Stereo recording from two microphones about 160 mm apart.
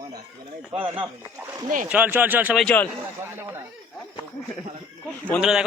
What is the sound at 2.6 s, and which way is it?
Speech, 10° left (ahead or behind).